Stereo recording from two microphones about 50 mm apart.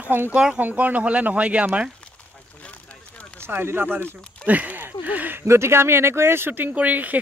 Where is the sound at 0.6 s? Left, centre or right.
Right.